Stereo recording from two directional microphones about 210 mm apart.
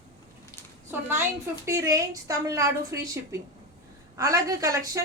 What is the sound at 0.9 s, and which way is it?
A woman's voice, 10° right (ahead or behind).